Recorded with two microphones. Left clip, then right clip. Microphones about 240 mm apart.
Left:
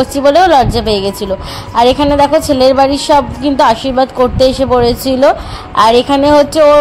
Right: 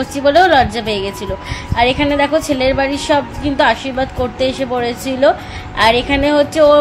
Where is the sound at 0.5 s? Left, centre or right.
Left.